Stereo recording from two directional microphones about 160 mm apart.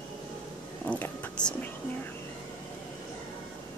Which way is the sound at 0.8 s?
10° left (ahead or behind).